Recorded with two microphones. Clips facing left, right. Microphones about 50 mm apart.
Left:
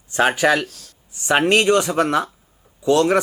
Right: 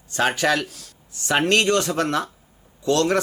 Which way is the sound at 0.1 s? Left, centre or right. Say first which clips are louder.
Left 4 dB; centre.